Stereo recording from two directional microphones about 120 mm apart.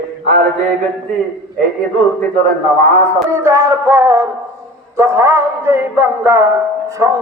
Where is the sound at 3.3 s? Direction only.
20° right (ahead or behind).